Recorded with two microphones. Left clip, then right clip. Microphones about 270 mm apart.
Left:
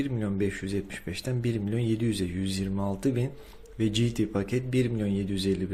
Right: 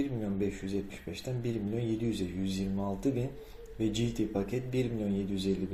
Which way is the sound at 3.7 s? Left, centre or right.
Left.